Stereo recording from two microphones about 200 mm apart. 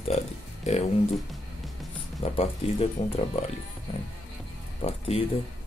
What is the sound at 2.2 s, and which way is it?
Speech, 30° left (ahead or behind).